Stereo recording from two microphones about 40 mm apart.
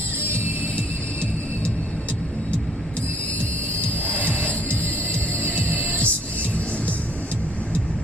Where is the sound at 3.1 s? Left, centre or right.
Left.